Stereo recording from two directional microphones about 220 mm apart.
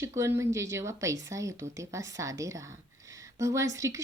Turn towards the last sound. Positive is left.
turn(degrees=-15)  # may be behind; listen again after turning